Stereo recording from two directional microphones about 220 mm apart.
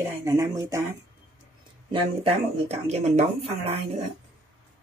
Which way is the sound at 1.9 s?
25° right (ahead or behind).